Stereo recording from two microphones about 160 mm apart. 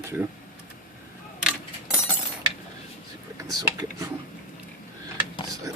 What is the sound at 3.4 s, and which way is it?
Speech, 20° right (ahead or behind).